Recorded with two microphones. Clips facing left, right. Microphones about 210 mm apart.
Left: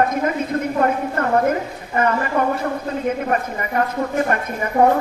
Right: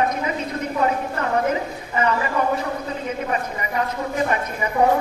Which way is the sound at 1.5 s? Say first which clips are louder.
Left 2 dB; 50° left (ahead or behind).